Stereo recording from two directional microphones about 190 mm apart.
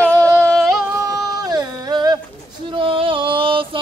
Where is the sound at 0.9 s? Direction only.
20° right (ahead or behind).